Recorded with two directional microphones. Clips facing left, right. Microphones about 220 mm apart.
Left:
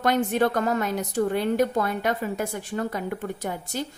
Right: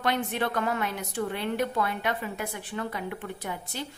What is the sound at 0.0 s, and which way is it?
A woman's voice, 45° left (ahead or behind).